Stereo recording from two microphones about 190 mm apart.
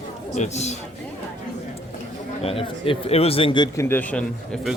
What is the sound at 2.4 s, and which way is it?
A man's voice, 30° left (ahead or behind).